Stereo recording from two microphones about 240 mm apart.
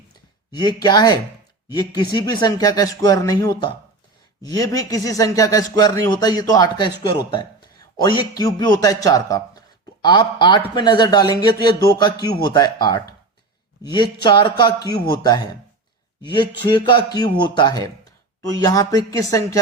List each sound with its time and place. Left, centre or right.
0.5 s a man's voice: centre